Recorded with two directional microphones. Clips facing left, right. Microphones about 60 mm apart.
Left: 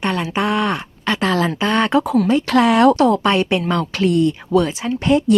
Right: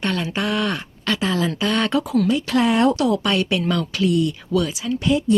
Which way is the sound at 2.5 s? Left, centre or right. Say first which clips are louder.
Left 6 dB; left.